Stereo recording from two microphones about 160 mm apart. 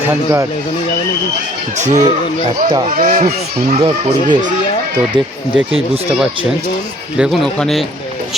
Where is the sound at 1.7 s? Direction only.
50° right (ahead or behind).